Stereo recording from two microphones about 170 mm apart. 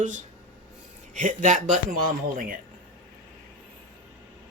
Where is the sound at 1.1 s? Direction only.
45° right (ahead or behind).